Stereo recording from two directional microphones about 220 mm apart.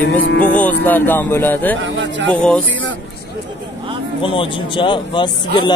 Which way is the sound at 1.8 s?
55° right (ahead or behind).